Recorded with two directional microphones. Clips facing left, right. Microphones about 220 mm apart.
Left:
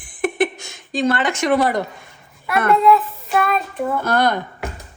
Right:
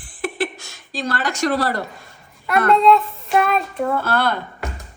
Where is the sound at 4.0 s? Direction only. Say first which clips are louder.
Left 3 dB; 15° left (ahead or behind).